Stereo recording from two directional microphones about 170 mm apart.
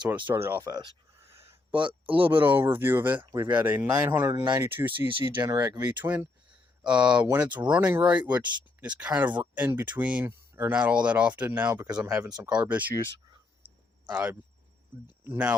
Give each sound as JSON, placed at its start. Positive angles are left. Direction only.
{"t": 0.3, "sound": "speech", "side_deg": -15}
{"t": 1.3, "sound": "a sound", "side_deg": -15}
{"t": 1.7, "sound": "speech", "side_deg": -30}
{"t": 2.4, "sound": "speech", "side_deg": -10}
{"t": 4.4, "sound": "speech", "side_deg": -25}
{"t": 4.7, "sound": "speech", "side_deg": -10}
{"t": 5.4, "sound": "speech", "side_deg": -20}
{"t": 6.1, "sound": "a sound", "side_deg": -5}
{"t": 7.3, "sound": "speech", "side_deg": -10}
{"t": 11.9, "sound": "speech", "side_deg": -25}
{"t": 12.4, "sound": "speech", "side_deg": -5}
{"t": 14.1, "sound": "speech", "side_deg": -5}